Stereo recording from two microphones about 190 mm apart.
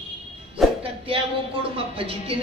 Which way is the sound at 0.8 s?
30° right (ahead or behind).